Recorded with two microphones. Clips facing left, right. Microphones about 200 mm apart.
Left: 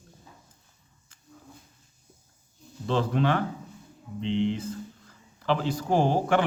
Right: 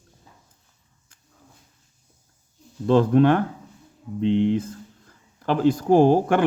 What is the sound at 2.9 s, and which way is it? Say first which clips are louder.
A man's voice: right 9 dB; 50° right (ahead or behind).